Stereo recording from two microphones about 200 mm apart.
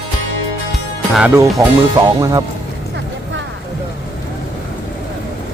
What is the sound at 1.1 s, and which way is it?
Speech, 10° right (ahead or behind).